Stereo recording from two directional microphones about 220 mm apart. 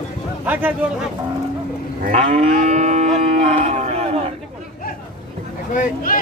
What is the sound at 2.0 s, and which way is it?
Livestock, 30° right (ahead or behind).